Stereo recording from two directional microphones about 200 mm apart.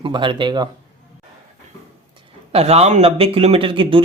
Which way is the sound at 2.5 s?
30° right (ahead or behind).